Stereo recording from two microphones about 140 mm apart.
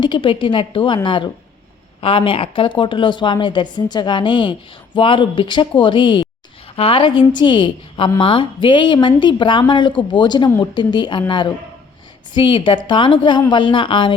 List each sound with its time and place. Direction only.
0.0 s speech: 35° left (ahead or behind)